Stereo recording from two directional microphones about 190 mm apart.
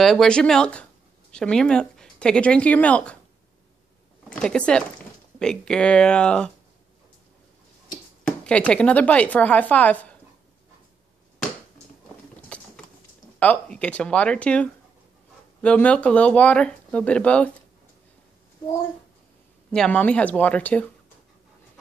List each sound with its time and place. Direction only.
0.0 s speech: centre (ahead or behind)
4.3 s speech: 5° left (ahead or behind)
8.3 s speech: 5° left (ahead or behind)
12.4 s a sound: 5° left (ahead or behind)
13.4 s speech: 5° left (ahead or behind)
19.7 s speech: 5° left (ahead or behind)